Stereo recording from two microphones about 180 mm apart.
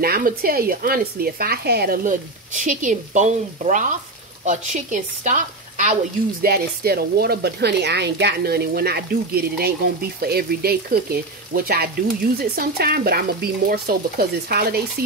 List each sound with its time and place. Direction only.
0.0 s speech: 55° right (ahead or behind); by 5.9 s 40° right (ahead or behind)
6.4 s speech: 60° right (ahead or behind)